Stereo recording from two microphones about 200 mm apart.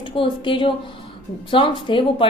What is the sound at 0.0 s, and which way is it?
A woman's voice, 25° left (ahead or behind).